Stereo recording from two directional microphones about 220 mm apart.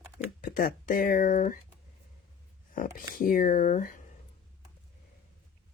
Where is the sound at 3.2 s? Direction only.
35° left (ahead or behind).